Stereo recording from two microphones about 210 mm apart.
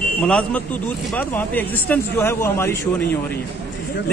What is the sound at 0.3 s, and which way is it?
Speech, 5° left (ahead or behind).